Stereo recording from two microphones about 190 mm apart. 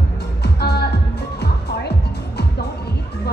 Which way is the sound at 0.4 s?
60° left (ahead or behind).